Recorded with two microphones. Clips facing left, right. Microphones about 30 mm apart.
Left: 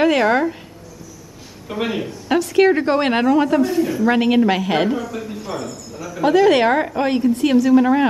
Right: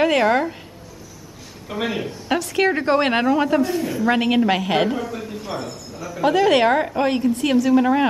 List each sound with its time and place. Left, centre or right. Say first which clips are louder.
0.0 s a woman's voice: left 2 dB; centre
1.7 s a woman's voice: left 2 dB; centre
5.5 s speech: left 2 dB; centre
6.2 s a woman's voice: left 2 dB; centre